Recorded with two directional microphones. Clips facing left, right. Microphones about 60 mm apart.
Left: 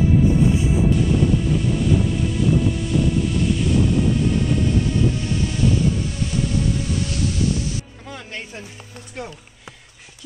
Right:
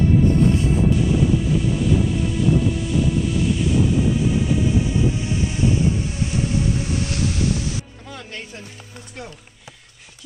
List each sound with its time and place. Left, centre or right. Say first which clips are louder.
0.0 s music: even; centre
0.9 s music: even; centre
6.9 s waves: even; right
8.1 s music: left 4 dB; centre